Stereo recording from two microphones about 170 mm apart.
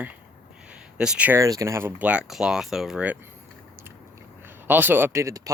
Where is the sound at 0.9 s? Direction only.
5° right (ahead or behind).